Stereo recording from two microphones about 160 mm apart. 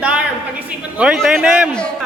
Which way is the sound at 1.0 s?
5° right (ahead or behind).